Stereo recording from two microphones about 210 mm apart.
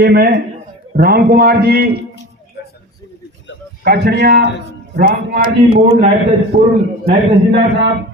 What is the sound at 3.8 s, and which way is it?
Speech, 50° right (ahead or behind).